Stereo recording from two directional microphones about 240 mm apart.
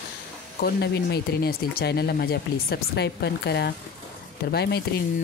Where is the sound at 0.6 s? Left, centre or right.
Left.